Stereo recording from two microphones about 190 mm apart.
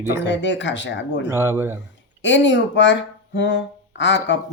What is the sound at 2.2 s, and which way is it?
Speech, 75° left (ahead or behind).